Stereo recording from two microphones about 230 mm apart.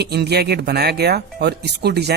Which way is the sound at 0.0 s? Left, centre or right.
Right.